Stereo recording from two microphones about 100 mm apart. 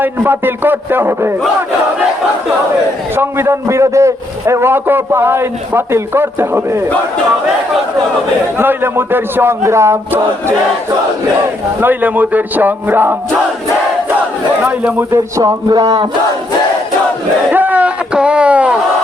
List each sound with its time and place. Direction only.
0.0 s a man's voice: 20° right (ahead or behind)
3.2 s a man's voice: 25° right (ahead or behind)
8.5 s a man's voice: 25° right (ahead or behind)
11.8 s speech: 20° right (ahead or behind)
14.6 s speech: 15° right (ahead or behind)
15.1 s speech: 35° right (ahead or behind)
17.5 s a sound: 15° right (ahead or behind)